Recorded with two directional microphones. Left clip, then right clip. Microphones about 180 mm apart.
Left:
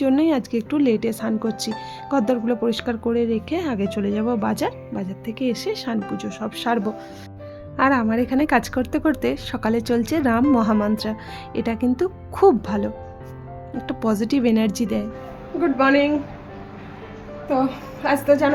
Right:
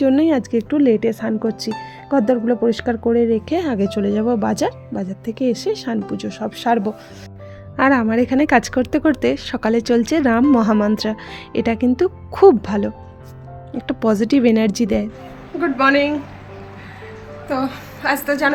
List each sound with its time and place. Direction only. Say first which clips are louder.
0.0 s a woman's voice: right 4 dB; 25° right (ahead or behind)
15.6 s a woman's voice: right 2 dB; centre (ahead or behind)
17.5 s a woman's voice: left 1 dB; 5° left (ahead or behind)